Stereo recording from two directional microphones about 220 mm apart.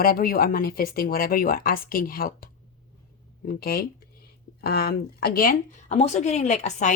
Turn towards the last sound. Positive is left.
turn(degrees=35)  # may be behind; listen again after turning